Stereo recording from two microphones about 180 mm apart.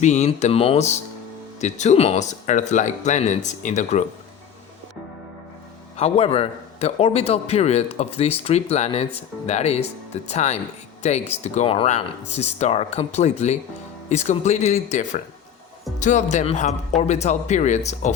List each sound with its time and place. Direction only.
0.0 s a man's voice: 40° left (ahead or behind)
6.0 s a man's voice: 35° left (ahead or behind)